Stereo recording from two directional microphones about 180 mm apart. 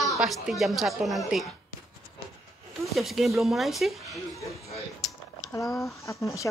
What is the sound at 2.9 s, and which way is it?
A woman's voice, centre (ahead or behind).